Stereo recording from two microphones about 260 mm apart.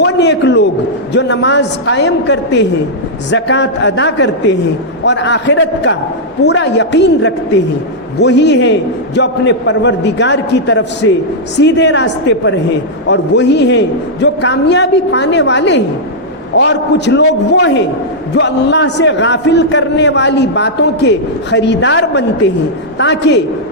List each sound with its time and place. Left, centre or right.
0.0 s a man's voice: left